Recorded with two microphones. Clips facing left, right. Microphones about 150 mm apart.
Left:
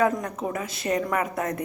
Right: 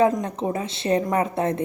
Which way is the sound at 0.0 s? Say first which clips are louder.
Right 4 dB; 25° right (ahead or behind).